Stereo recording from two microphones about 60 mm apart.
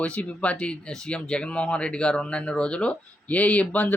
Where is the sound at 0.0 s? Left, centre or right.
Left.